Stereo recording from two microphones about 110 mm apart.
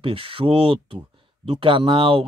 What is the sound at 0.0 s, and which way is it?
Speech, 55° right (ahead or behind).